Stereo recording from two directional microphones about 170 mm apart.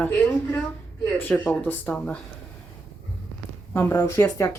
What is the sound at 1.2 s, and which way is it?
Speech, 10° left (ahead or behind).